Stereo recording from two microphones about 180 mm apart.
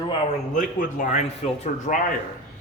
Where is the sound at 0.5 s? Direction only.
45° left (ahead or behind).